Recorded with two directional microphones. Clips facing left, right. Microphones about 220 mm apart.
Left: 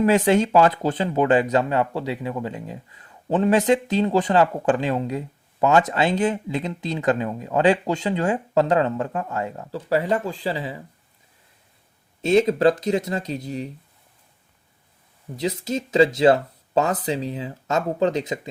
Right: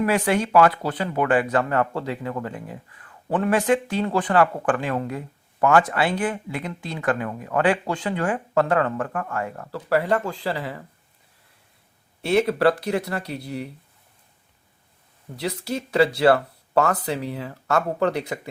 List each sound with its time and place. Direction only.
0.3 s speech: 25° left (ahead or behind)
12.2 s speech: 20° left (ahead or behind)
15.4 s speech: 20° left (ahead or behind)